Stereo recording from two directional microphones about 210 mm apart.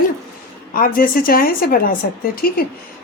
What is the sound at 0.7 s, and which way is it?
A woman's voice, 40° left (ahead or behind).